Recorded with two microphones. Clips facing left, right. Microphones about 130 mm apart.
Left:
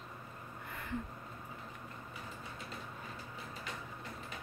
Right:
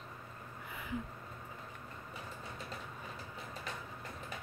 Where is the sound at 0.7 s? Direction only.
5° right (ahead or behind).